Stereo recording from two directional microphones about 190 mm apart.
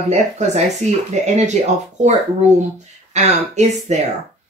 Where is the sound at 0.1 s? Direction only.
35° right (ahead or behind).